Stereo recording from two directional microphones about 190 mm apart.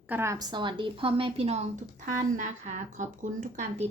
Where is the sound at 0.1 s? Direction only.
15° right (ahead or behind).